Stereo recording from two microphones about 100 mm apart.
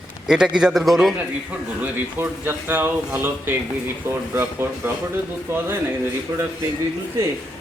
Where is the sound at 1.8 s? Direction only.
20° right (ahead or behind).